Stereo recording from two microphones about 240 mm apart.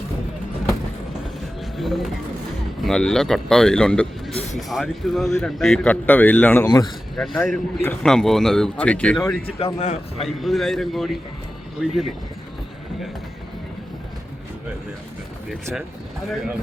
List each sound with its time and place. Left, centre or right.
1.8 s a man's voice: centre
7.2 s a man's voice: centre
9.5 s a man's voice: left
10.2 s a man's voice: centre